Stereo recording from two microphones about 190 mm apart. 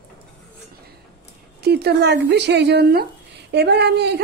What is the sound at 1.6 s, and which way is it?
A woman's voice, 60° right (ahead or behind).